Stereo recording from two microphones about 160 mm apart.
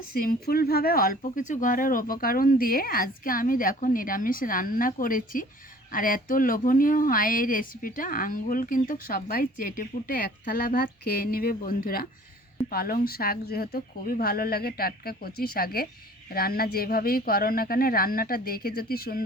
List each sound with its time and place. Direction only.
0.1 s speech: 65° left (ahead or behind)
1.2 s speech: 50° left (ahead or behind); by 19.2 s 70° left (ahead or behind)